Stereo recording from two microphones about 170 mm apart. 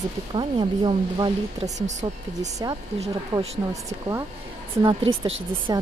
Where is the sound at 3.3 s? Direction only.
30° right (ahead or behind).